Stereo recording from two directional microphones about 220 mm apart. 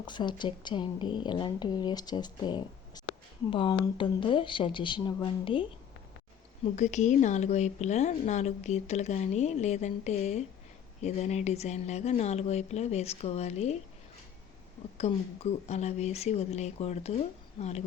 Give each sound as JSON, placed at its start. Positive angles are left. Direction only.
{"t": 0.0, "sound": "speech", "side_deg": 20}
{"t": 6.7, "sound": "a woman's voice", "side_deg": 30}
{"t": 14.9, "sound": "speech", "side_deg": 30}